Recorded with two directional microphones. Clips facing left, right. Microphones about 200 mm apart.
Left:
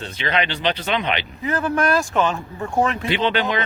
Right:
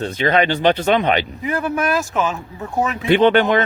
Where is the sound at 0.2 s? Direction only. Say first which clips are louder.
Right 6 dB; 45° right (ahead or behind).